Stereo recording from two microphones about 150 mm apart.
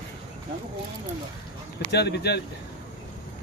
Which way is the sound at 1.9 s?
90° left.